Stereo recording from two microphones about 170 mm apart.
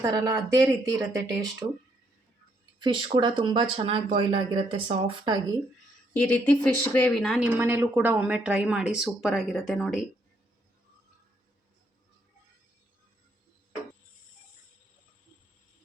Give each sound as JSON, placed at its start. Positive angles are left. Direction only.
{"t": 0.0, "sound": "speech", "side_deg": -20}
{"t": 2.7, "sound": "speech", "side_deg": -25}
{"t": 6.1, "sound": "a woman's voice", "side_deg": 10}
{"t": 7.5, "sound": "speech", "side_deg": -15}